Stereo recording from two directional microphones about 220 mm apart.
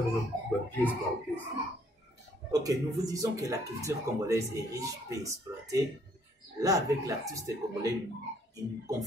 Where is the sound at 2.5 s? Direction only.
15° right (ahead or behind).